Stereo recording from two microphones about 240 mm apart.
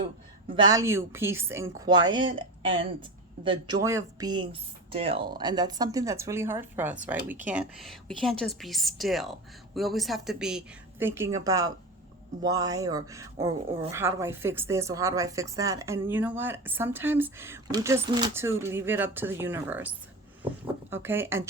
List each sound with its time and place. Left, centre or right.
0.5 s speech: centre
20.9 s speech: centre